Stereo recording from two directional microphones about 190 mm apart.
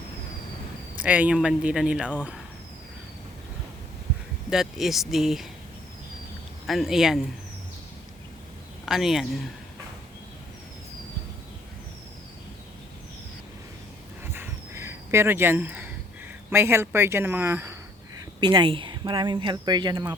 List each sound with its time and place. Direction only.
0.9 s speech: 10° right (ahead or behind)
4.4 s speech: centre (ahead or behind)
6.7 s speech: centre (ahead or behind)
8.9 s speech: centre (ahead or behind)
14.3 s a sound: 15° right (ahead or behind)
16.5 s speech: 10° right (ahead or behind)
18.3 s speech: 25° right (ahead or behind)